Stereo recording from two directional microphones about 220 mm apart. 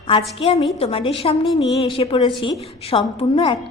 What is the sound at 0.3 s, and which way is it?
A woman's voice, 25° left (ahead or behind).